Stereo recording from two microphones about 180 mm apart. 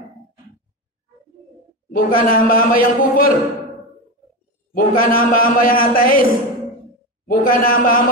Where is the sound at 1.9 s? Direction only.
55° left (ahead or behind).